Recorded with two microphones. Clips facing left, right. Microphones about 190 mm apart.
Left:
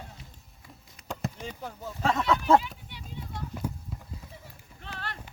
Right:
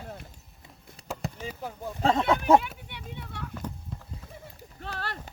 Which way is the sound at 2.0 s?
30° right (ahead or behind).